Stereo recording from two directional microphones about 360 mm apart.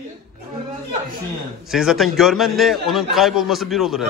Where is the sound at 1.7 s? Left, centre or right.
Centre.